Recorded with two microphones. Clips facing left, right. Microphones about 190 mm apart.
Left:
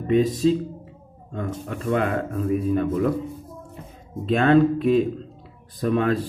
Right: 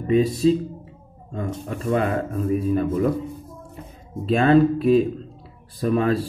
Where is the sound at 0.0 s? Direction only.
10° right (ahead or behind).